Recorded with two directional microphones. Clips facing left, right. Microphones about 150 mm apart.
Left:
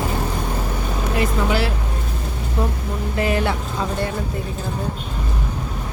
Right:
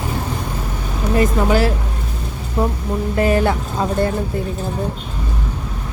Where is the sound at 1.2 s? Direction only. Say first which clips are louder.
Right 5 dB; 40° right (ahead or behind).